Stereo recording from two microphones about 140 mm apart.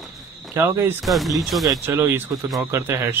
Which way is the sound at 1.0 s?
Centre (ahead or behind).